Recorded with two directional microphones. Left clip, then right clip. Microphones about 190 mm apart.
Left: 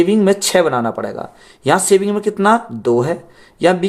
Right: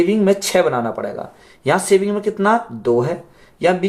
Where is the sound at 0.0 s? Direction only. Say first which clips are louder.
Left 2 dB; 45° left (ahead or behind).